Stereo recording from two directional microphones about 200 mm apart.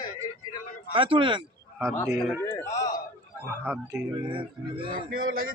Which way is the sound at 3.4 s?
10° right (ahead or behind).